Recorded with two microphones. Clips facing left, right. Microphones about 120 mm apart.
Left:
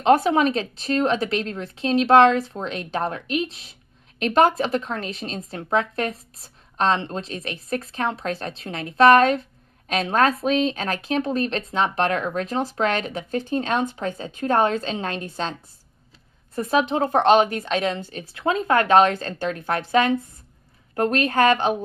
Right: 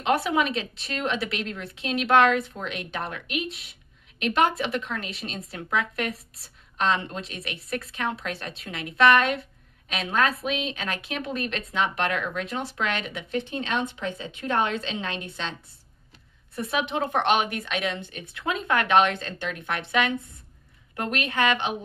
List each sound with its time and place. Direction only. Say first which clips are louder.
0.0 s a woman's voice: left 6 dB; 40° left (ahead or behind)
16.5 s a woman's voice: left 6 dB; 40° left (ahead or behind)